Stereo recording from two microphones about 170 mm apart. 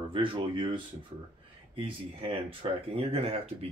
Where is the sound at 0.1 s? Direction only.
30° right (ahead or behind).